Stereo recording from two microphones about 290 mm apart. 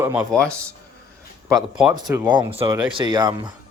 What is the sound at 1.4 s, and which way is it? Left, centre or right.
A man's voice, centre.